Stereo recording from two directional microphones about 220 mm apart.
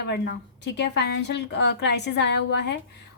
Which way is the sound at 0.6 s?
50° left (ahead or behind).